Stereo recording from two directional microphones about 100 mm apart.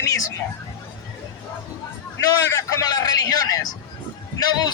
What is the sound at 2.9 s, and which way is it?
Speech, 40° left (ahead or behind).